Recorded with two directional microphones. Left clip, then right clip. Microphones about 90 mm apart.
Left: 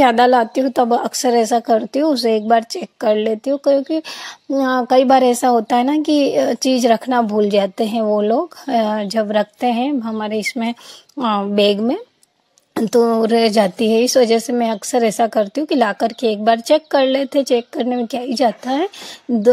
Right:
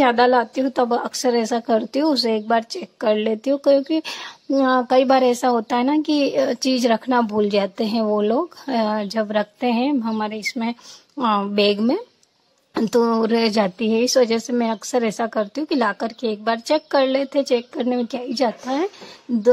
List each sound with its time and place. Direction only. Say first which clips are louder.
0.0 s a woman's voice: left 4 dB; 35° left (ahead or behind)
13.0 s a woman's voice: left 6 dB; 40° left (ahead or behind); by 19.4 s 25° left (ahead or behind)